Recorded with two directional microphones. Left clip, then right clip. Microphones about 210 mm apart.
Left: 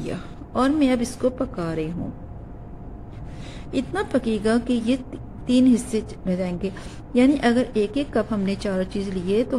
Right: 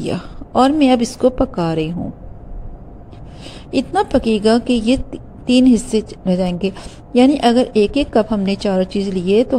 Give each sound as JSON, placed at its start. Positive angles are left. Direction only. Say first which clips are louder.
{"t": 0.0, "sound": "a woman's voice", "louder": "right 8 dB", "side_deg": -25}
{"t": 3.7, "sound": "a woman's voice", "louder": "right 8 dB", "side_deg": -20}